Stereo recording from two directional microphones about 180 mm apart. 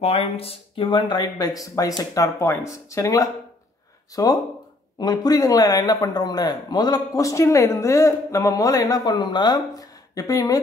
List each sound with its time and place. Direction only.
0.0 s a man's voice: 35° left (ahead or behind)